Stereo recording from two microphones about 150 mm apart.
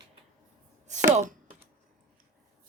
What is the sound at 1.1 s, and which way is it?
Computer keyboard, 50° right (ahead or behind).